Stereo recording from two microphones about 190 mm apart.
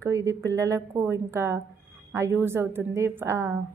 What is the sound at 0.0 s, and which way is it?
A woman's voice, 15° right (ahead or behind).